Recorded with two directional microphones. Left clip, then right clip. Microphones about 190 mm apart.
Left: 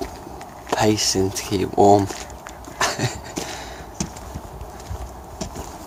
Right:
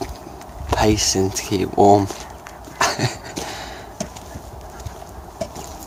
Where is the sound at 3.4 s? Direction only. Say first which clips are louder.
Even; centre (ahead or behind).